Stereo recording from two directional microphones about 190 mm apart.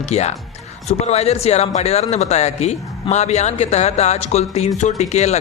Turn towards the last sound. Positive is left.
turn(degrees=35)  # may be behind; listen again after turning